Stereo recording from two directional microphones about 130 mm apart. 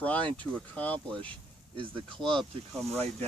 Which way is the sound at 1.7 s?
40° right (ahead or behind).